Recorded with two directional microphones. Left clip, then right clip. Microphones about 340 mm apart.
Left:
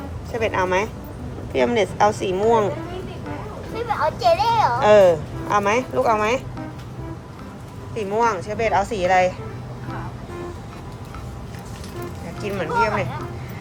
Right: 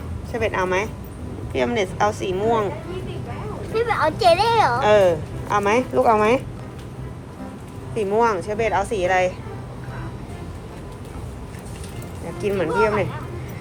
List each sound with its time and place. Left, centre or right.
0.3 s a woman's voice: centre
3.8 s a woman's voice: right
4.8 s a woman's voice: centre
7.9 s a woman's voice: centre
12.4 s speech: centre